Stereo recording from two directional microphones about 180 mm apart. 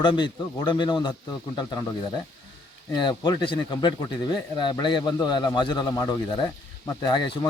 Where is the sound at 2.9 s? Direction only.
25° left (ahead or behind).